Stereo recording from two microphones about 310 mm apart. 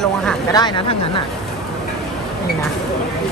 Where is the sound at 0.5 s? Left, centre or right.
Centre.